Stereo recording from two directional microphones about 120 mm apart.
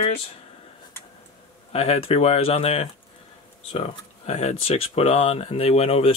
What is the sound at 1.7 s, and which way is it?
Speech, 55° left (ahead or behind).